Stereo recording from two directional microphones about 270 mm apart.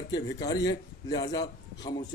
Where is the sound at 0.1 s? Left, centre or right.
Centre.